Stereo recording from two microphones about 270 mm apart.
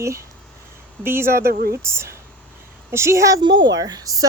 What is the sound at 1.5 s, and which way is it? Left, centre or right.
Speech, right.